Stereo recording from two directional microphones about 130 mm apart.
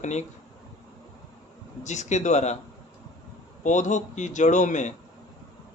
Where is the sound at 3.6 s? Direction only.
70° left (ahead or behind).